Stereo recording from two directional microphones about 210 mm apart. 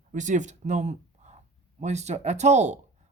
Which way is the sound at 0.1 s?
35° right (ahead or behind).